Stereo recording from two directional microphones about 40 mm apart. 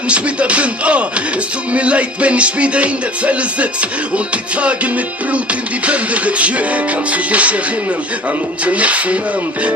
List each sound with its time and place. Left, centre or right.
0.1 s music: right
5.8 s music: right
8.6 s music: right